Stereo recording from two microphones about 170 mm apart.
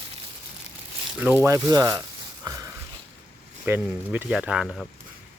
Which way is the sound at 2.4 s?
20° right (ahead or behind).